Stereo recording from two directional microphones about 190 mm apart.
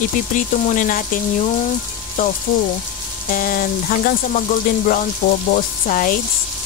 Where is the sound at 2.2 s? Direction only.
45° left (ahead or behind).